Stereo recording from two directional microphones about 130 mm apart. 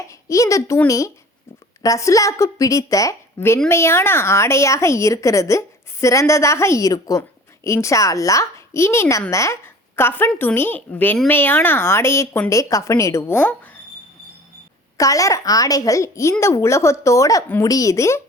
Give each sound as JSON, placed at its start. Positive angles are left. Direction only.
{"t": 0.1, "sound": "a woman's voice", "side_deg": 25}
{"t": 14.9, "sound": "a woman's voice", "side_deg": 25}